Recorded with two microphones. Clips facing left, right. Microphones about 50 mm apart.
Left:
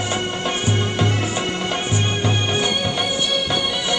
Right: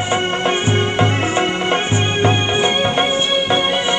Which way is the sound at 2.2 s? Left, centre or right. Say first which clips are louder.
Right 7 dB; right.